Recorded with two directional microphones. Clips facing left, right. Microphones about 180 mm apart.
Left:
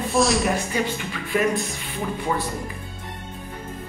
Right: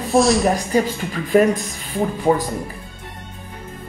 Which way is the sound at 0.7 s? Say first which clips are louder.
Right 6 dB; 40° right (ahead or behind).